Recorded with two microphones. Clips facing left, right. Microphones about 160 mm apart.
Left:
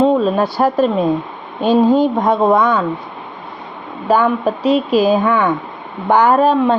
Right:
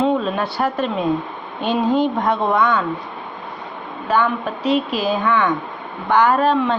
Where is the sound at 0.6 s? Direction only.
40° left (ahead or behind).